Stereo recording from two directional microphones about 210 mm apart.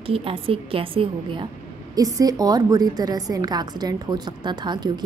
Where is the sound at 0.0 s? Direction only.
25° right (ahead or behind).